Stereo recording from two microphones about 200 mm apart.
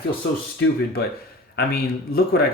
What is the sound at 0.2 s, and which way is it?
Speech, 55° left (ahead or behind).